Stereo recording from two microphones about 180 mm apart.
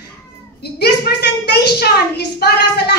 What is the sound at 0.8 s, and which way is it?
A woman's voice, 65° left (ahead or behind).